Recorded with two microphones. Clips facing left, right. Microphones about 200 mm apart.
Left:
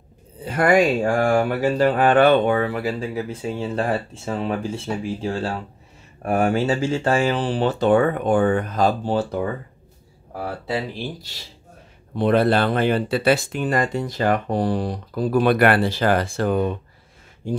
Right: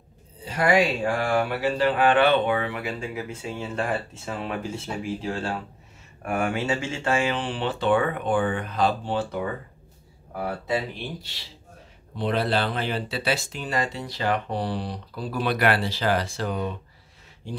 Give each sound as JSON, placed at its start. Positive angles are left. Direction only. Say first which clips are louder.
{"t": 0.4, "sound": "speech", "louder": "left 4 dB", "side_deg": 55}
{"t": 12.2, "sound": "speech", "louder": "left 7 dB", "side_deg": 50}